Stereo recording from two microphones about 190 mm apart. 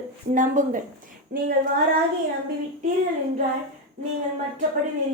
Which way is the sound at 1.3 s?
55° right (ahead or behind).